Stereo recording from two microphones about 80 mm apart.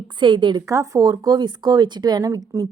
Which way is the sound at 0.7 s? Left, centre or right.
Right.